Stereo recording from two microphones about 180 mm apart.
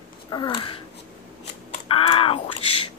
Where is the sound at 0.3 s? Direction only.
25° left (ahead or behind).